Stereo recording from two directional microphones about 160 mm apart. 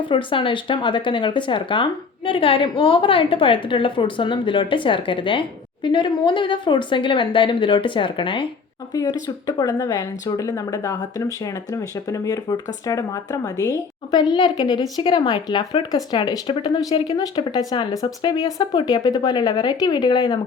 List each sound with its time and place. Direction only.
0.0 s speech: 30° left (ahead or behind)